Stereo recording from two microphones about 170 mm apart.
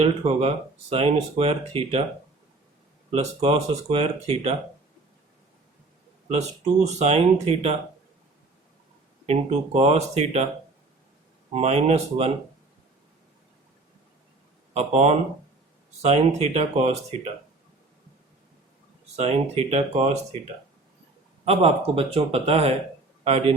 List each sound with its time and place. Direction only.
0.0 s speech: 35° right (ahead or behind)
3.1 s speech: 35° right (ahead or behind)
7.0 s speech: 40° right (ahead or behind)
9.2 s speech: 40° right (ahead or behind)
11.5 s speech: 40° right (ahead or behind)
14.7 s speech: 40° right (ahead or behind)
19.1 s speech: 35° right (ahead or behind)